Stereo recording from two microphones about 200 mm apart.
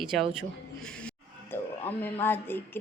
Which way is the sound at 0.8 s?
5° left (ahead or behind).